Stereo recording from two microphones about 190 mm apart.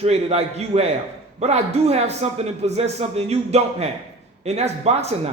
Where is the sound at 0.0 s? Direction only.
35° right (ahead or behind).